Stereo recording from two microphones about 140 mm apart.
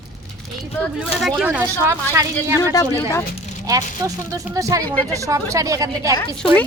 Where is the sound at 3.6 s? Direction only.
25° right (ahead or behind).